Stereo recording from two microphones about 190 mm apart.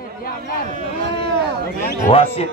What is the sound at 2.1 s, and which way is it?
Speech, 30° left (ahead or behind).